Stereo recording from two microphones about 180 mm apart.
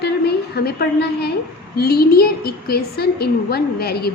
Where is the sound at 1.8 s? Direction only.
60° left (ahead or behind).